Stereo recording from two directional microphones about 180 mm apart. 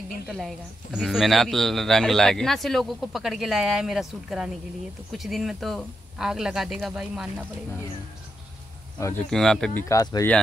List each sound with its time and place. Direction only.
0.3 s speech: centre (ahead or behind)
9.0 s speech: 10° left (ahead or behind)
9.8 s speech: 20° left (ahead or behind)